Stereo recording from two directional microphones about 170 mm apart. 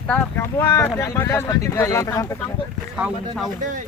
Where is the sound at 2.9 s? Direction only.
5° right (ahead or behind).